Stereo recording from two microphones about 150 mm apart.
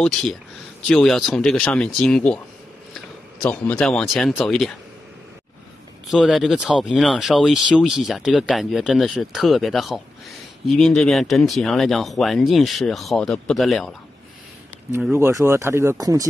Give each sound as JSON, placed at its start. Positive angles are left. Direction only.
{"t": 0.0, "sound": "speech", "side_deg": 5}
{"t": 3.4, "sound": "speech", "side_deg": 10}
{"t": 6.0, "sound": "speech", "side_deg": 0}
{"t": 15.1, "sound": "speech", "side_deg": -15}